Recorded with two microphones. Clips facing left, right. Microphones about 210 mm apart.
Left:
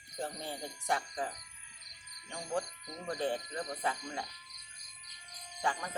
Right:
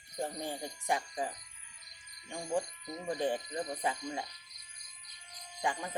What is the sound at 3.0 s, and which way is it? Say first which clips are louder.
Speech: right 2 dB; 15° right (ahead or behind).